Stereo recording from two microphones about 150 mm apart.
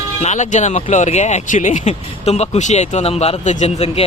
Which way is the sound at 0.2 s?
50° left (ahead or behind).